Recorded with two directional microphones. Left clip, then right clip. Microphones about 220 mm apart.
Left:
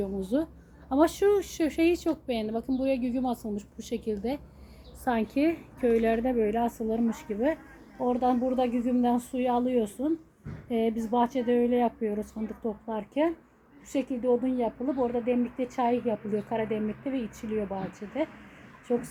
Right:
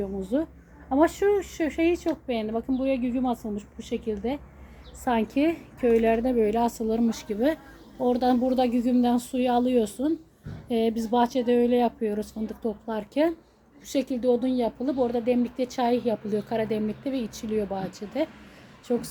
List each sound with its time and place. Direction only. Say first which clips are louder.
0.0 s a woman's voice: right 1 dB; 15° left (ahead or behind); by 18.3 s 5° right (ahead or behind)